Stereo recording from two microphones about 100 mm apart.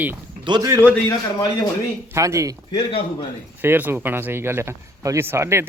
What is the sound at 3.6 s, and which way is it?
A man's voice, 20° right (ahead or behind).